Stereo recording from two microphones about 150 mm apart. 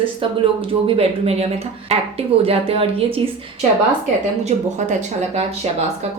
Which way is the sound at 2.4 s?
40° right (ahead or behind).